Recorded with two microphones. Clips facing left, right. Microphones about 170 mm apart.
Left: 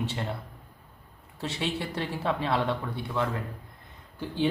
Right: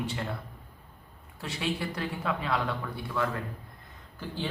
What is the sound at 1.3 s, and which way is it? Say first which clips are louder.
Speech: left 1 dB; 25° left (ahead or behind).